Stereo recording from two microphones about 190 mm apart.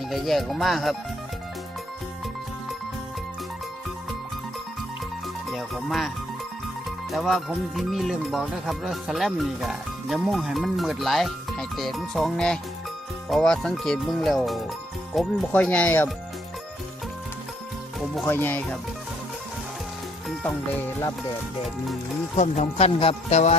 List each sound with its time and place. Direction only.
0.1 s speech: centre (ahead or behind)
5.5 s speech: centre (ahead or behind)
7.1 s speech: centre (ahead or behind)
18.3 s speech: 10° left (ahead or behind)
22.4 s speech: 35° left (ahead or behind)